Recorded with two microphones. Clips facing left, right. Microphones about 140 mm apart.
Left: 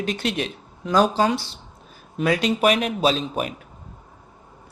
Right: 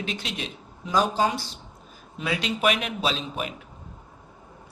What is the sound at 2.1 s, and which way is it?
Speech, 45° left (ahead or behind).